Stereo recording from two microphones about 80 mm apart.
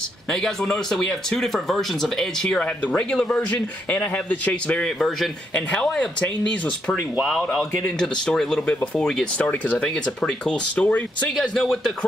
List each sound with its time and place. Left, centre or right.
0.3 s speech: centre
4.8 s speech: centre
5.5 s speech: centre
7.2 s speech: centre